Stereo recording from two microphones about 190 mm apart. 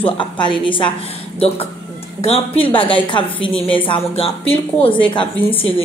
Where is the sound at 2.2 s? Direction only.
30° left (ahead or behind).